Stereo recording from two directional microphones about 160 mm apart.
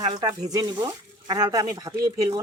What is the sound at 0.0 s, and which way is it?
Speech, 25° right (ahead or behind).